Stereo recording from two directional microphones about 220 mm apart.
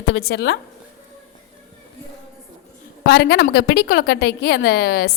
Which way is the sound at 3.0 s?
50° left (ahead or behind).